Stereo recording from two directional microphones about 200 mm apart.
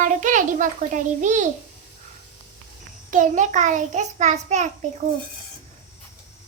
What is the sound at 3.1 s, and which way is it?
A child's voice, 40° right (ahead or behind).